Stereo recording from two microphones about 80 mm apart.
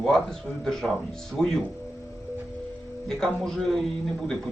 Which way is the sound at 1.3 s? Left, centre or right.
Centre.